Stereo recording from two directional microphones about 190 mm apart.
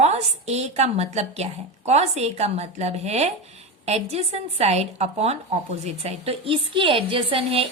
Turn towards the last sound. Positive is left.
turn(degrees=-30)  # may be behind; listen again after turning